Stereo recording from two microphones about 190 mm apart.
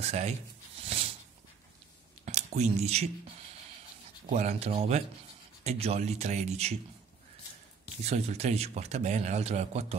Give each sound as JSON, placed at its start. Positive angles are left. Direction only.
{"t": 0.1, "sound": "speech", "side_deg": -35}
{"t": 2.2, "sound": "a sound", "side_deg": -35}
{"t": 4.3, "sound": "speech", "side_deg": -35}
{"t": 8.0, "sound": "speech", "side_deg": -35}